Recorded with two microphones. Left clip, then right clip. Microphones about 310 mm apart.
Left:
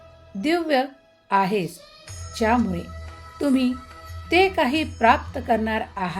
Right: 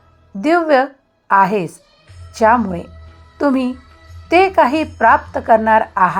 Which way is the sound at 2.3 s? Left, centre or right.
Centre.